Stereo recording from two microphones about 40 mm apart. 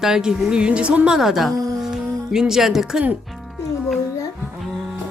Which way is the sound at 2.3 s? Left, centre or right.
Centre.